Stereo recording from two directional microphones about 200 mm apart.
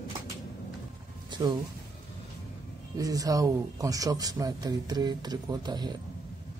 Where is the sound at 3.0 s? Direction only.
15° right (ahead or behind).